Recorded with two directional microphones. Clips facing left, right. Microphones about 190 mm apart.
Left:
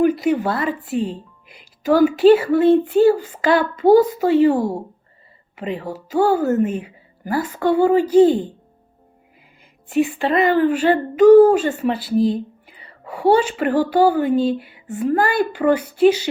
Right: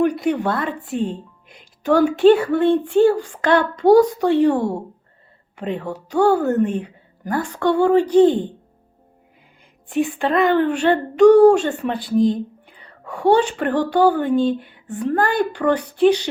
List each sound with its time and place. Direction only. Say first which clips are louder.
0.0 s speech: left 2 dB; 5° left (ahead or behind)
9.9 s a child's voice: left 1 dB; 5° left (ahead or behind)